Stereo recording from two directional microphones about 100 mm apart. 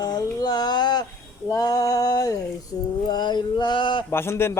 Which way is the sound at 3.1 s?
45° left (ahead or behind).